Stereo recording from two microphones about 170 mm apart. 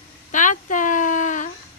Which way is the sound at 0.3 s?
50° left (ahead or behind).